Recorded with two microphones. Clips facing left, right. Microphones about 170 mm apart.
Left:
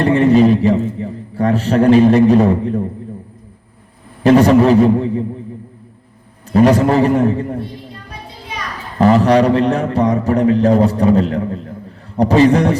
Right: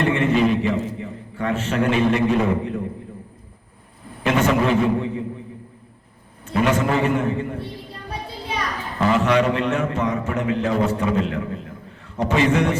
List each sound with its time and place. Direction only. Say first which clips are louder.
0.0 s a man's voice: left 8 dB; 35° left (ahead or behind)
4.2 s a man's voice: left 10 dB; 35° left (ahead or behind)
6.5 s a man's voice: left 8 dB; 35° left (ahead or behind)
9.0 s a man's voice: left 7 dB; 35° left (ahead or behind)